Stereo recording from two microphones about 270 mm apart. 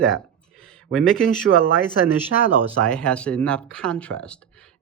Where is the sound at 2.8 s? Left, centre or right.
Centre.